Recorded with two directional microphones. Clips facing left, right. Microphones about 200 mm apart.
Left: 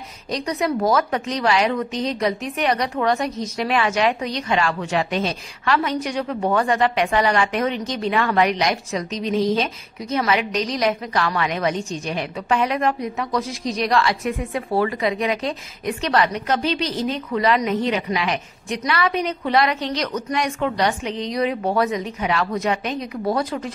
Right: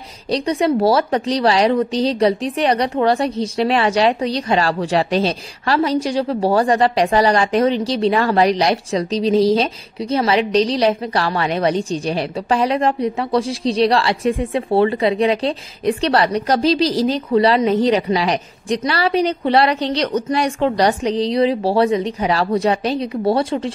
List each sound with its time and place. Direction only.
0.3 s speech: 30° right (ahead or behind)